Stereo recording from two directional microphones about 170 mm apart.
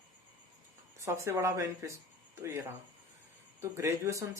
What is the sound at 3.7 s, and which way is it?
Speech, 15° right (ahead or behind).